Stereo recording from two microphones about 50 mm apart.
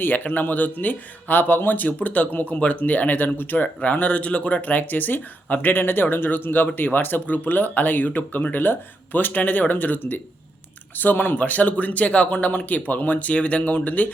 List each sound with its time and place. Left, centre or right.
0.0 s speech: left
3.9 s speech: left